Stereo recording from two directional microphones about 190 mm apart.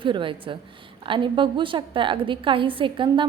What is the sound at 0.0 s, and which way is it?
A woman's voice, 25° right (ahead or behind).